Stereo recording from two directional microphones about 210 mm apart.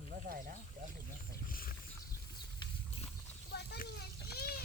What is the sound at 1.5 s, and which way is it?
Wild animals, 45° left (ahead or behind).